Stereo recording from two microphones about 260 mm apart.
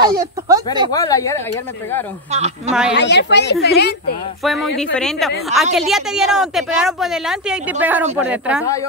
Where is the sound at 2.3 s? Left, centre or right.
Right.